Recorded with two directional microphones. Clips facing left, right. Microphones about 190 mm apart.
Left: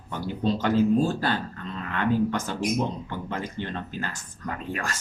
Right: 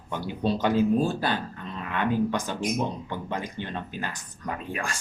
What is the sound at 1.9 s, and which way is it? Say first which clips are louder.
Speech: left 1 dB; 15° right (ahead or behind).